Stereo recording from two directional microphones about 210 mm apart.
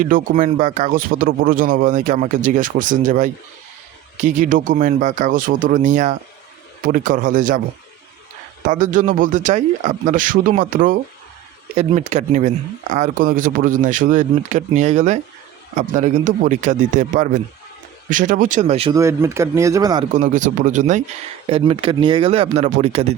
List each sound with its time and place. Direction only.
0.0 s speech: 40° right (ahead or behind)
8.6 s speech: 40° right (ahead or behind)
18.9 s speech: 15° right (ahead or behind)
20.1 s speech: 35° right (ahead or behind)